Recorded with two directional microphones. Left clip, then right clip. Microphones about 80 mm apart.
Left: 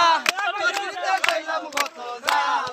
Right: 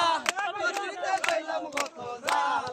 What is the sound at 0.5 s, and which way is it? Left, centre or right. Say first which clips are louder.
Crowd: left 6 dB; centre.